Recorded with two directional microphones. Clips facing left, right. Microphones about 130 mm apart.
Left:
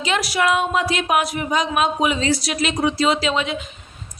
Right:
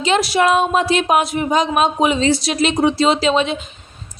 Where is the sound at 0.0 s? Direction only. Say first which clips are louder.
Right 5 dB; 25° right (ahead or behind).